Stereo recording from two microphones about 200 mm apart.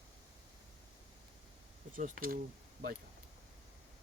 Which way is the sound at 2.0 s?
40° right (ahead or behind).